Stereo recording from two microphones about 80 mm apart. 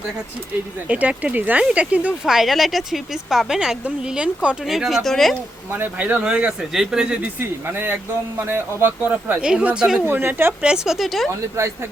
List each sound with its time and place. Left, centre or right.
0.9 s speech: centre
2.2 s a woman's voice: centre
5.7 s speech: right
9.0 s speech: centre
10.1 s speech: right
10.6 s a woman's voice: centre
11.3 s speech: right